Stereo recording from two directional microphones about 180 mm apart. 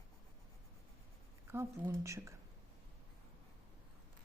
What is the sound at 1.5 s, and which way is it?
Speech, 15° right (ahead or behind).